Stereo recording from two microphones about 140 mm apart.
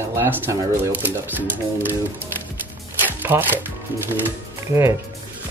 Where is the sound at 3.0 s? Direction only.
15° right (ahead or behind).